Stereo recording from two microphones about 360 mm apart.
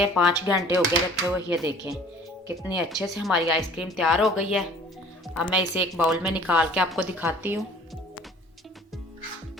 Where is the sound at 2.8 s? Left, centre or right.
Centre.